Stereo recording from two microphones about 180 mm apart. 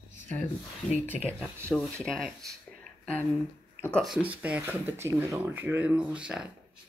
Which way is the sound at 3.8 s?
Centre (ahead or behind).